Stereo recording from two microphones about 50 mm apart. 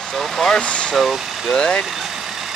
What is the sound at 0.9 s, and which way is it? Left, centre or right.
Speech, centre.